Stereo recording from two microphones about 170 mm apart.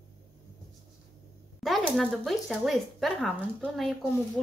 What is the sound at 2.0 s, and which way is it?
Speech, centre (ahead or behind).